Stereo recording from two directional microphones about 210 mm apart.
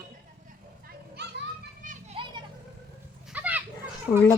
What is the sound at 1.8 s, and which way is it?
Children playing, 25° right (ahead or behind).